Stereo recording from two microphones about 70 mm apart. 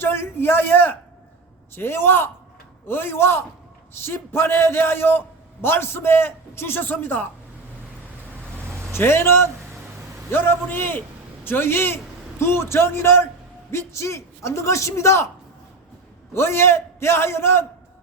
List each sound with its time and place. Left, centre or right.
0.0 s a sound: left
1.7 s a man's voice: left
8.9 s a man's voice: left
16.3 s a man's voice: left